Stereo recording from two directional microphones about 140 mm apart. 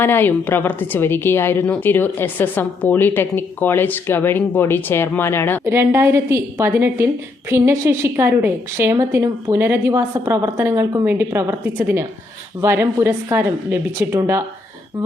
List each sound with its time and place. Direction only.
0.0 s speech: 15° left (ahead or behind)
5.6 s a woman's voice: 20° right (ahead or behind)